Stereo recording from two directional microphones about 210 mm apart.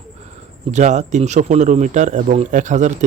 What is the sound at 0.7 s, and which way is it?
A man's voice, 35° right (ahead or behind).